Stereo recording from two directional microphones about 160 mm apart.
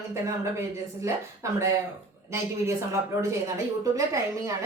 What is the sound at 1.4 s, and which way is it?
A woman's voice, 20° right (ahead or behind).